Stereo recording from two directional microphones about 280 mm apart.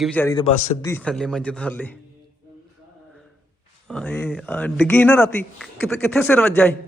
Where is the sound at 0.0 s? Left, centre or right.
Centre.